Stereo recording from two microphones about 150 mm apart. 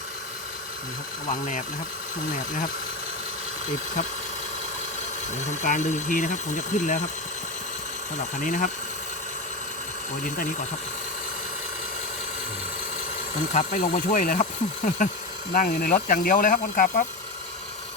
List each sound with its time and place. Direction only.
1.3 s speech: 60° left (ahead or behind)
5.4 s speech: 55° left (ahead or behind)
8.4 s speech: 60° left (ahead or behind)
13.5 s speech: 55° left (ahead or behind)